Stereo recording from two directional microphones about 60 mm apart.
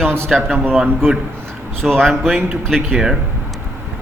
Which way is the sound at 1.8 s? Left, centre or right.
Centre.